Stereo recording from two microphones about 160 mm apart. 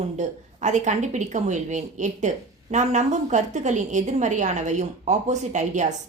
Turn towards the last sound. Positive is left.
turn(degrees=-50)  # may be behind; listen again after turning